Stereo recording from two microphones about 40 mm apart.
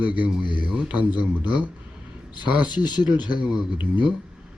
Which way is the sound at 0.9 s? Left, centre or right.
Right.